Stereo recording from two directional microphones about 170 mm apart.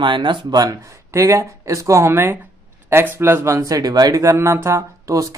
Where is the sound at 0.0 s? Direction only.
30° right (ahead or behind).